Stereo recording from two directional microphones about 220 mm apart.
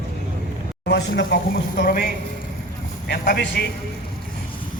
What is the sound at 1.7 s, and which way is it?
Speech, 40° left (ahead or behind).